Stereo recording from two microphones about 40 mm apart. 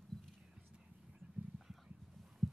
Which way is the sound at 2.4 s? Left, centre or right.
Centre.